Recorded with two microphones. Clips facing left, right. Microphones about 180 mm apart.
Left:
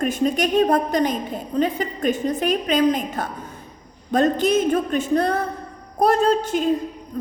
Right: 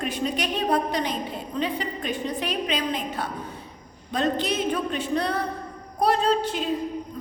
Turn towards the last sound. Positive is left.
turn(degrees=45)  # may be behind; listen again after turning